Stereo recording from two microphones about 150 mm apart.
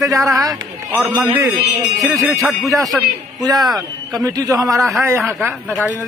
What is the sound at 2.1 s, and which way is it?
Speech, 15° right (ahead or behind).